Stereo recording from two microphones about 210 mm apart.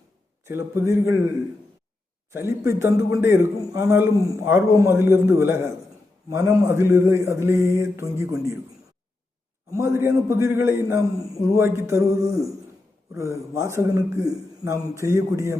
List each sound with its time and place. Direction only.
0.4 s a man's voice: 10° right (ahead or behind)
2.3 s a man's voice: 10° right (ahead or behind)
9.7 s a man's voice: 10° right (ahead or behind)